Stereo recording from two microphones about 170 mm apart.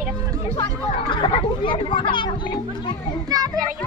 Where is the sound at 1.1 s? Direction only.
30° left (ahead or behind).